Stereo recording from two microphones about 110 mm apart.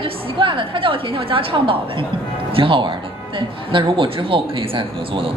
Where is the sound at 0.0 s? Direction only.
50° right (ahead or behind).